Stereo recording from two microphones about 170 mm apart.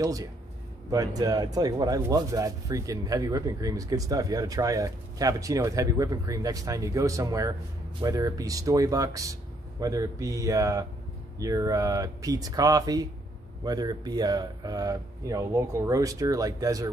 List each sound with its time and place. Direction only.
0.0 s speech: 20° right (ahead or behind)